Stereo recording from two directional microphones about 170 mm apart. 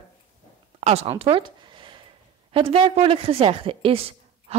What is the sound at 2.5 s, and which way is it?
A woman's voice, 35° right (ahead or behind).